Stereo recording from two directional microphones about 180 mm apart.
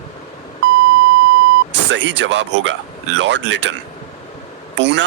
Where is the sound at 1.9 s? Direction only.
80° right.